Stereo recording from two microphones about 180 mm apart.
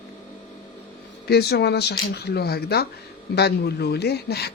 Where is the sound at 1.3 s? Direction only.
65° left (ahead or behind).